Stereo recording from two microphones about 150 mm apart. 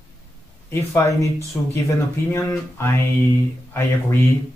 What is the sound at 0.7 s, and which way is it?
Speech, 20° left (ahead or behind).